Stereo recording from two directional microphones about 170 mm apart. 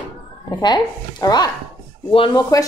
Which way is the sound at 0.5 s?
25° left (ahead or behind).